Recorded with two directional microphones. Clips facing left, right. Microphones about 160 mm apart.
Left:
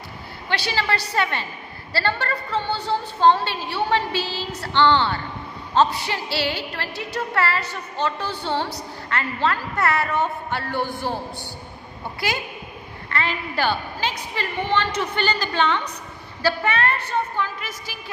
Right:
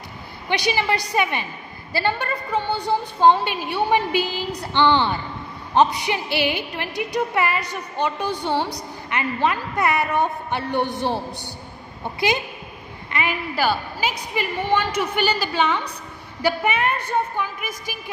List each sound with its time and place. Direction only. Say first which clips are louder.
0.5 s music: right 3 dB; 15° right (ahead or behind)
13.1 s music: right 1 dB; 15° right (ahead or behind)